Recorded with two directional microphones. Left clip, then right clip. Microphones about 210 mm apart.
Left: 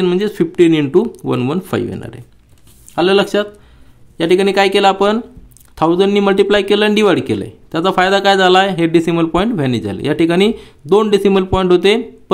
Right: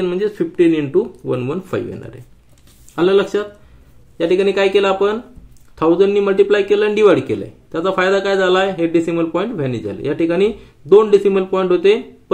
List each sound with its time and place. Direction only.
0.0 s speech: 45° left (ahead or behind)